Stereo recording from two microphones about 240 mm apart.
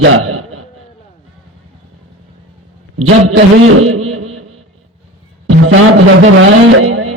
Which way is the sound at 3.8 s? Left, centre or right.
Right.